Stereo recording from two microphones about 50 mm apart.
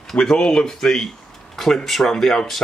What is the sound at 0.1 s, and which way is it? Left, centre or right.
Speech, centre.